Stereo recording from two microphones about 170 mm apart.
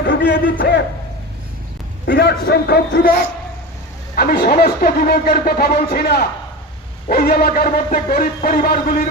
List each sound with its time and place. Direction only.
0.0 s a sound: 80° left
0.6 s a man's voice: 80° left
2.0 s a man's voice: 75° left (ahead or behind)
4.1 s a man's voice: 60° left (ahead or behind)